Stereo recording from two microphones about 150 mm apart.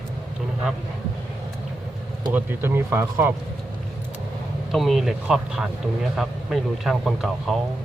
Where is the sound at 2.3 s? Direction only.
15° right (ahead or behind).